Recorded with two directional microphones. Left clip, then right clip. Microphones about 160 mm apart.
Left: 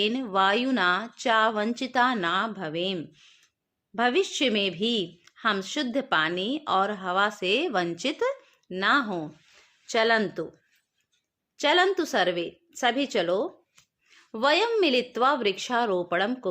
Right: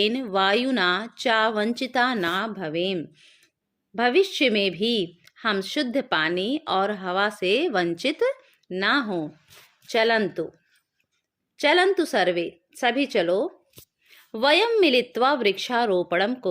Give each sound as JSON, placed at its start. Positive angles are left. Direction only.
{"t": 0.0, "sound": "speech", "side_deg": -35}